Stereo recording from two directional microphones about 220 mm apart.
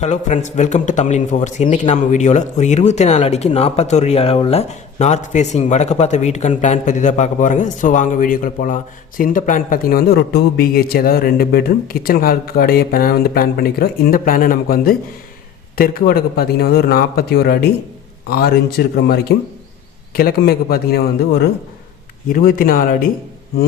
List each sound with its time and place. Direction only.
0.0 s a man's voice: 30° left (ahead or behind)